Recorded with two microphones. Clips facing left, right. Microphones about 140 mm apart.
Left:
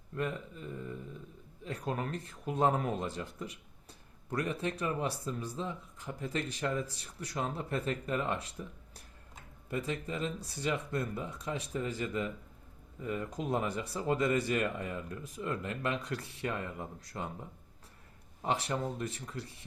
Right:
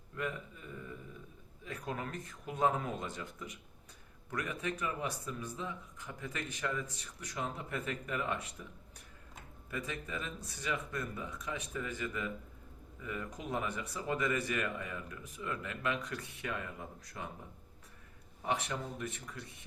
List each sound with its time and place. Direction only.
0.2 s speech: 30° left (ahead or behind)
9.6 s speech: 30° left (ahead or behind)
18.4 s speech: 35° left (ahead or behind)